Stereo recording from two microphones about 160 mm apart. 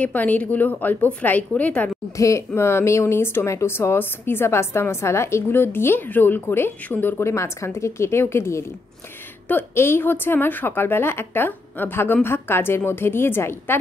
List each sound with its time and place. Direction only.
0.0 s speech: 10° left (ahead or behind)